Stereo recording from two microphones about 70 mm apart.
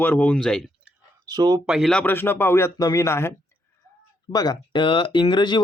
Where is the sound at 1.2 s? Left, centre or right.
Right.